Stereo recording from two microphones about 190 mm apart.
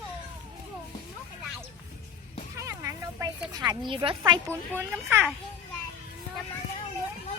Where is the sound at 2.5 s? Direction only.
15° right (ahead or behind).